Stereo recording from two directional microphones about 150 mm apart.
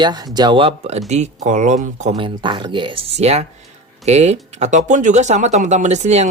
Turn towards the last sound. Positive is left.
turn(degrees=-50)  # may be behind; listen again after turning